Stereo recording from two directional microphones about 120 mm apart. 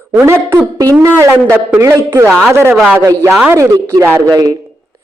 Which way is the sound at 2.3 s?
5° left (ahead or behind).